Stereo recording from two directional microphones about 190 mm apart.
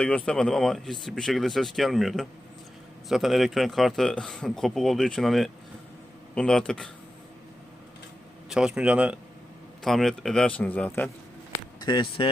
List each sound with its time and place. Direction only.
0.0 s a man's voice: 5° left (ahead or behind)
8.4 s a man's voice: 5° right (ahead or behind)
11.5 s a sound: 20° left (ahead or behind)